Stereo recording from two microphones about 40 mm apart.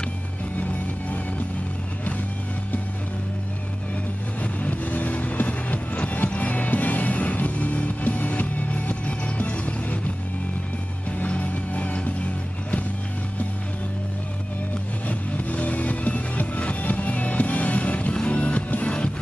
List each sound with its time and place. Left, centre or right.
4.4 s music: left
11.1 s music: left
15.0 s music: left